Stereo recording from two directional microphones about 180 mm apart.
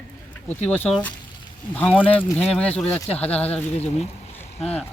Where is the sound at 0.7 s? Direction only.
10° left (ahead or behind).